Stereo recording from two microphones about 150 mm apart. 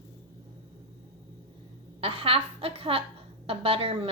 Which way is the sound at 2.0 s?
40° right (ahead or behind).